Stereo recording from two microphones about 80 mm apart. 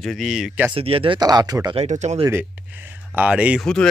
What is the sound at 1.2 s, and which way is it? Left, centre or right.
Speech, right.